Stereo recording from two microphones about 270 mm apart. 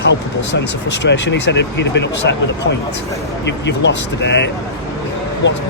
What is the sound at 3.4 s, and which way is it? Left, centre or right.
Speech, left.